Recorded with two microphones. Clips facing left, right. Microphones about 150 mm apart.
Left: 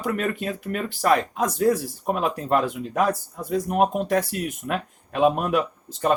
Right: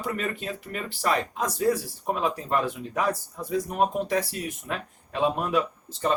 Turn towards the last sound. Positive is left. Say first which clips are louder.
# left 4 dB
turn(degrees=55)  # may be behind; listen again after turning